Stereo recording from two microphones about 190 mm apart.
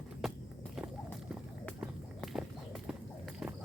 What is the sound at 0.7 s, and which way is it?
Clip-clop, 5° right (ahead or behind).